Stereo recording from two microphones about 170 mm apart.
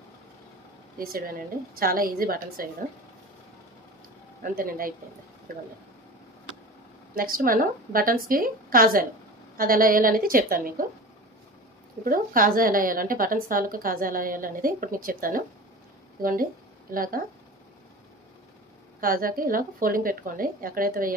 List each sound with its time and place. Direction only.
0.9 s speech: 60° right (ahead or behind)
4.4 s speech: 55° right (ahead or behind)
7.2 s speech: 55° right (ahead or behind)
12.0 s speech: 55° right (ahead or behind)
18.9 s speech: 55° right (ahead or behind)